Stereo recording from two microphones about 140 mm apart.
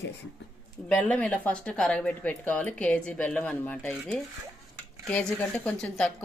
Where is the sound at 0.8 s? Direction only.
10° left (ahead or behind).